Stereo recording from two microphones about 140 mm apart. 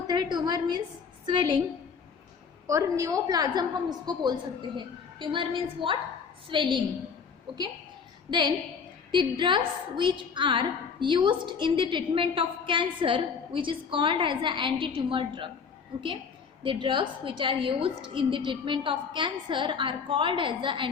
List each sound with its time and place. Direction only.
0.1 s a sound: 30° right (ahead or behind)
1.2 s a woman's voice: 30° right (ahead or behind)
2.6 s a woman's voice: 20° right (ahead or behind)
8.3 s a woman's voice: 35° right (ahead or behind)
16.6 s a woman's voice: 35° right (ahead or behind)